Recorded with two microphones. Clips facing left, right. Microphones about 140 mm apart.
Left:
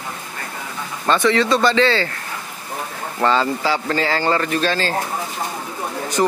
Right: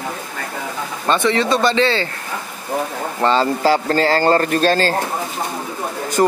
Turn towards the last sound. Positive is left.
turn(degrees=-45)  # may be behind; listen again after turning